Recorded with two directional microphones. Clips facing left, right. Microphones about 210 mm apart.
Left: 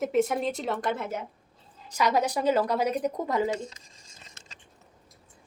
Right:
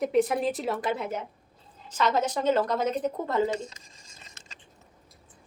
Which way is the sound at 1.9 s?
10° left (ahead or behind).